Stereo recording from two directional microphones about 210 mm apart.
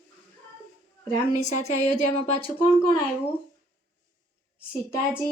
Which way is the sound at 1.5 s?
35° left (ahead or behind).